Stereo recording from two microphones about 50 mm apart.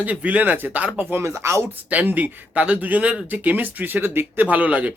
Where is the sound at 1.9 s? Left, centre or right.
Right.